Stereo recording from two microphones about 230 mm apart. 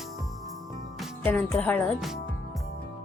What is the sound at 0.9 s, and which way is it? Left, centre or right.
Music, centre.